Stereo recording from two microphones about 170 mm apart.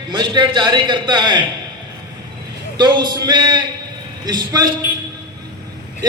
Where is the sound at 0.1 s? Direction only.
25° right (ahead or behind).